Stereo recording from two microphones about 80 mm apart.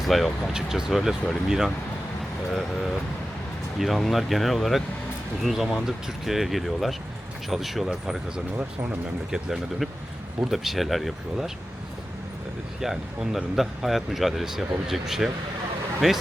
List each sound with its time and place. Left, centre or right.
0.0 s speech: centre
8.5 s speech: right
9.3 s speech: centre
12.8 s speech: centre